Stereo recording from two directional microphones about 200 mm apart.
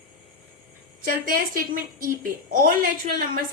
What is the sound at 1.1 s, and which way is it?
A woman's voice, 45° right (ahead or behind).